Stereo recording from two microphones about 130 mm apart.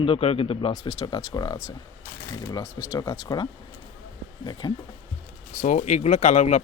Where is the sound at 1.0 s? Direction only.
30° left (ahead or behind).